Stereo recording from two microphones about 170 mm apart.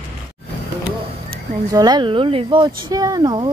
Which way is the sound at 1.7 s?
25° right (ahead or behind).